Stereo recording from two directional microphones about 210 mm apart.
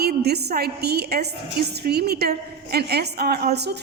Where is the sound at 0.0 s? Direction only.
50° right (ahead or behind).